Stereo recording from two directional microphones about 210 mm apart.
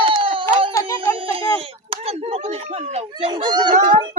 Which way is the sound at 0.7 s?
15° left (ahead or behind).